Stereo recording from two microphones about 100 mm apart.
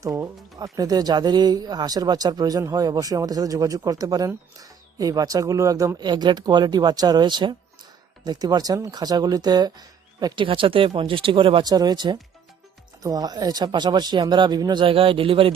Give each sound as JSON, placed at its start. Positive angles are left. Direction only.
{"t": 0.0, "sound": "speech", "side_deg": -35}
{"t": 6.1, "sound": "speech", "side_deg": -45}
{"t": 10.4, "sound": "speech", "side_deg": -60}
{"t": 11.6, "sound": "speech", "side_deg": -40}
{"t": 14.8, "sound": "speech", "side_deg": -65}